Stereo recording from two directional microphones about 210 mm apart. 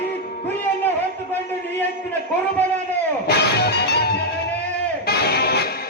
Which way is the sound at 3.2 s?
50° left (ahead or behind).